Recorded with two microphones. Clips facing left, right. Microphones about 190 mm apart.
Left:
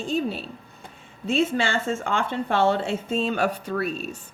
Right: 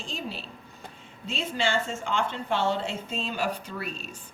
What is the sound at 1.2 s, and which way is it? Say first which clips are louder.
A woman's voice: left 6 dB; 50° left (ahead or behind).